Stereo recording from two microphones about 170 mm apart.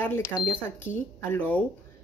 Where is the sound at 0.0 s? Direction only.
15° left (ahead or behind).